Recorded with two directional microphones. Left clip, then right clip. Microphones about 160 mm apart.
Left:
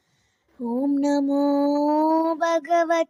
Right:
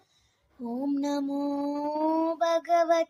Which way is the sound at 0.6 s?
25° left (ahead or behind).